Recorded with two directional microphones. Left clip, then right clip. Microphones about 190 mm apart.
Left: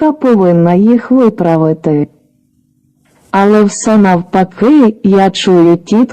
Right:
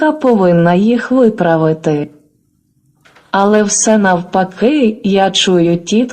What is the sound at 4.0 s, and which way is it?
A woman's voice, 40° left (ahead or behind).